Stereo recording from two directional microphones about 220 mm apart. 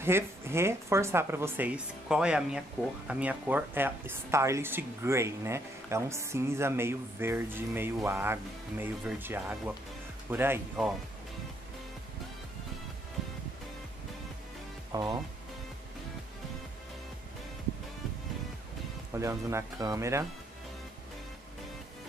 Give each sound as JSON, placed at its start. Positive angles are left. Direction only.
{"t": 0.0, "sound": "speech", "side_deg": -10}
{"t": 14.9, "sound": "speech", "side_deg": -15}
{"t": 19.1, "sound": "speech", "side_deg": -15}